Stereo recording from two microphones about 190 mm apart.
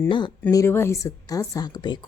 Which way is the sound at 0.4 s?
15° left (ahead or behind).